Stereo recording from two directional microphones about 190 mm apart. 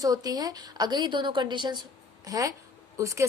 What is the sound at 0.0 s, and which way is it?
A woman's voice, 20° right (ahead or behind).